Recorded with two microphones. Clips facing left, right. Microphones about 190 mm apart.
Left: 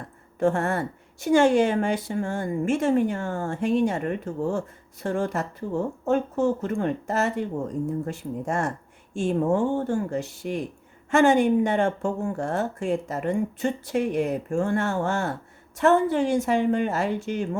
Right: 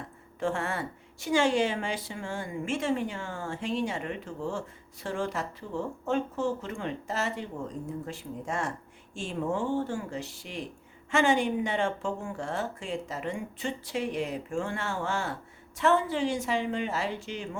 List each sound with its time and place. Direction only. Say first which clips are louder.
0.3 s a woman's voice: left 7 dB; 45° left (ahead or behind)